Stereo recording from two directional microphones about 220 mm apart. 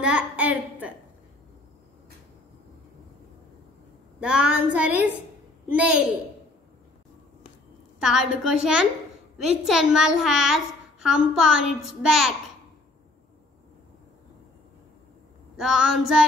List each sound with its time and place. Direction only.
0.0 s a sound: 5° right (ahead or behind)
4.2 s a woman's voice: 5° right (ahead or behind)
8.0 s a woman's voice: centre (ahead or behind)
15.5 s a woman's voice: 5° right (ahead or behind)